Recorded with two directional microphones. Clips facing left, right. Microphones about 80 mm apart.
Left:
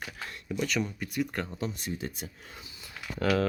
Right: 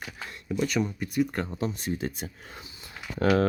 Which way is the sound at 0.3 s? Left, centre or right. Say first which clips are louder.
Right 2 dB; centre.